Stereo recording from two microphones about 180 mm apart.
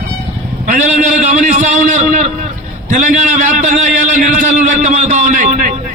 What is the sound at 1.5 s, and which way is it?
A man's voice, 45° right (ahead or behind).